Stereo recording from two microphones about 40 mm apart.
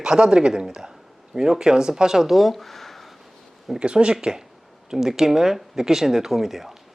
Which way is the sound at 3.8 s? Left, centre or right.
Right.